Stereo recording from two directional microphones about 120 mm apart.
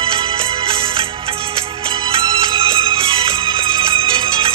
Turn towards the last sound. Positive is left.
turn(degrees=-50)  # may be behind; listen again after turning